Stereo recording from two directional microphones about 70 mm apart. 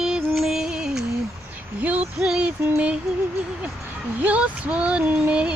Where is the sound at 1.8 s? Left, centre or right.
Centre.